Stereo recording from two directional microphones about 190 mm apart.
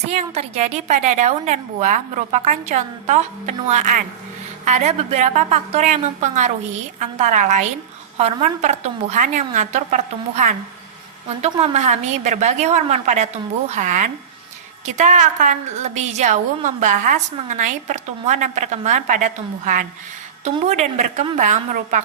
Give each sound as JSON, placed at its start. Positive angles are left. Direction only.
{"t": 0.1, "sound": "a woman's voice", "side_deg": -35}
{"t": 11.6, "sound": "a woman's voice", "side_deg": -35}